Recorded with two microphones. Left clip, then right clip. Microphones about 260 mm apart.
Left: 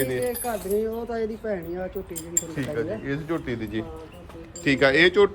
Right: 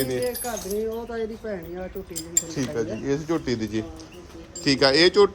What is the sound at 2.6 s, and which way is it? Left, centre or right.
A man's voice, centre.